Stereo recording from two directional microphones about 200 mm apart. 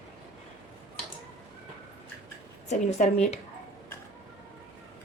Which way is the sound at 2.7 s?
35° left (ahead or behind).